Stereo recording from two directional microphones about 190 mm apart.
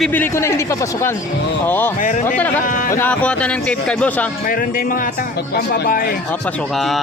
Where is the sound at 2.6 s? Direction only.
45° left (ahead or behind).